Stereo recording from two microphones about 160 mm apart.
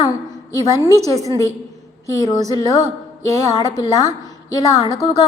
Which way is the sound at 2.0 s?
25° left (ahead or behind).